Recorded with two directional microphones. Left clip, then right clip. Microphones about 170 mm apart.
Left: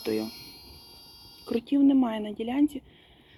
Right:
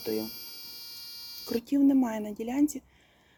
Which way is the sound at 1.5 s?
5° right (ahead or behind).